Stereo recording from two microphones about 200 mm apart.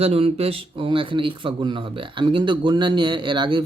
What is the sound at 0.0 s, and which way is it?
A man's voice, 30° right (ahead or behind).